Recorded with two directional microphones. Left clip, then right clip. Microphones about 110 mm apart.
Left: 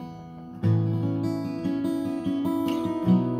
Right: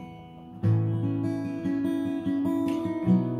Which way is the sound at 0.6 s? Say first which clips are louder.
Left 2 dB; 30° left (ahead or behind).